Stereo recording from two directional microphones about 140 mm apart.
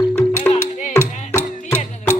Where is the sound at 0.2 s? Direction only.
10° left (ahead or behind).